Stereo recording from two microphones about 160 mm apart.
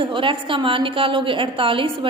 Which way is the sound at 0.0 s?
30° right (ahead or behind).